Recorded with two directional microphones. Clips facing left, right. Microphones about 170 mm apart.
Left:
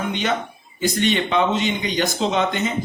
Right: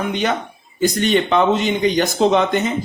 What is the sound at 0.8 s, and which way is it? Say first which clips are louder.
A man's voice: right 4 dB; 45° right (ahead or behind).